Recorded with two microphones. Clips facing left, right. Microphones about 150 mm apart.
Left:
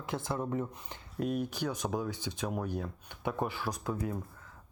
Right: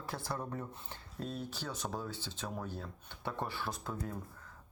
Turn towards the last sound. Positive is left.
turn(degrees=5)  # may be behind; listen again after turning